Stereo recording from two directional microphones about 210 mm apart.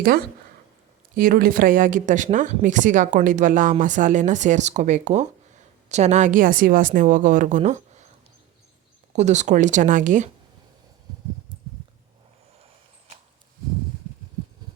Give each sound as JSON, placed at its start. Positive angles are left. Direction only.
{"t": 1.1, "sound": "speech", "side_deg": -45}
{"t": 9.1, "sound": "speech", "side_deg": -35}